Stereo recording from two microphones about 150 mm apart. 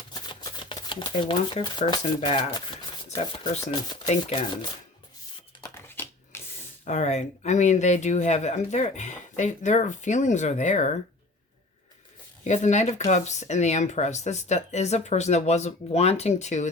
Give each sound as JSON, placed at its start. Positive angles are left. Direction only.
{"t": 0.1, "sound": "shuffling cards", "side_deg": 30}
{"t": 1.9, "sound": "speech", "side_deg": 30}
{"t": 3.6, "sound": "speech", "side_deg": 25}
{"t": 4.0, "sound": "speech", "side_deg": 45}
{"t": 5.6, "sound": "a sound", "side_deg": 15}
{"t": 6.8, "sound": "speech", "side_deg": 55}
{"t": 12.5, "sound": "speech", "side_deg": 50}